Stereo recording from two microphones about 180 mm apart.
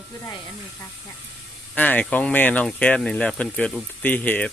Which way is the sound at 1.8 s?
10° left (ahead or behind).